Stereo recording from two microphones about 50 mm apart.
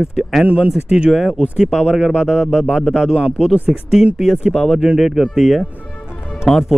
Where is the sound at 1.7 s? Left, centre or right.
Centre.